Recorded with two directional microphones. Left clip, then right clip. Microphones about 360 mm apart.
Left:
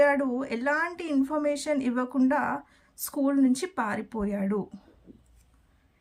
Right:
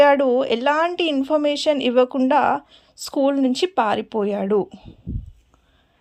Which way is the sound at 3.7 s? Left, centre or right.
Right.